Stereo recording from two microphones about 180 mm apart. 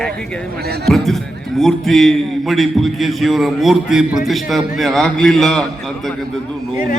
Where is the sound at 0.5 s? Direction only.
60° right (ahead or behind).